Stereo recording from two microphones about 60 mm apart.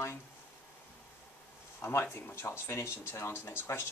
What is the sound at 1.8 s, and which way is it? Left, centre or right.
Speech, left.